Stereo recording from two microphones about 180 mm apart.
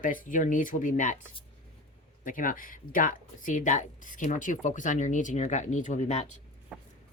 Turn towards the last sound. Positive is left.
turn(degrees=-5)  # may be behind; listen again after turning